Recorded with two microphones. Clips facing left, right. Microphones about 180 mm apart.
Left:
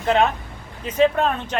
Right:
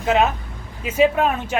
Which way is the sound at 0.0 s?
5° right (ahead or behind).